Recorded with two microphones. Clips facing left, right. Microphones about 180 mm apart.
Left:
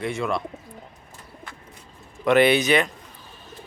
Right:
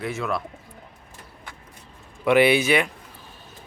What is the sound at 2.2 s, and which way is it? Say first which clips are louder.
Speech: even; 10° right (ahead or behind).